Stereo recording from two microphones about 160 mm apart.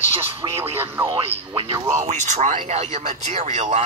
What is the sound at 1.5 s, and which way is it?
Speech, 35° right (ahead or behind).